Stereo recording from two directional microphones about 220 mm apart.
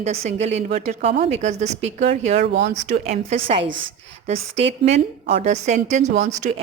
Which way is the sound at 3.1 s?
30° right (ahead or behind).